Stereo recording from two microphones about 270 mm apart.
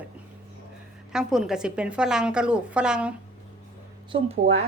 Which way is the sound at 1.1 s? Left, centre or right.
Centre.